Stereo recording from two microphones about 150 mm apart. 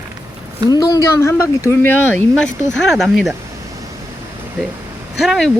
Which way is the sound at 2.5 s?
20° right (ahead or behind).